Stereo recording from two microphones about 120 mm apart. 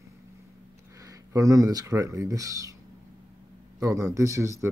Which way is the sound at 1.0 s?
30° right (ahead or behind).